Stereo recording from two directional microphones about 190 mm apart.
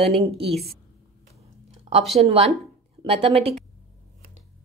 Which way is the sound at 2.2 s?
35° right (ahead or behind).